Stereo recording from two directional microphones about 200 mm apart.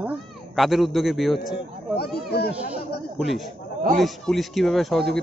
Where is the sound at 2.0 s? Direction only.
55° left (ahead or behind).